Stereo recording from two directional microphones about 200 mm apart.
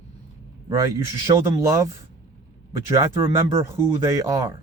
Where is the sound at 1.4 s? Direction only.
20° right (ahead or behind).